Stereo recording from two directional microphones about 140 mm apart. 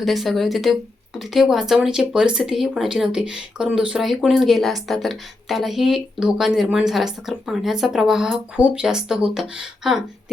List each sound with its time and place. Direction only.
0.0 s speech: centre (ahead or behind)